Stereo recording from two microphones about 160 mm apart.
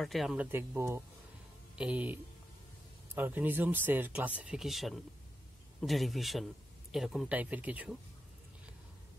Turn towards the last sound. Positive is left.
turn(degrees=-10)  # may be behind; listen again after turning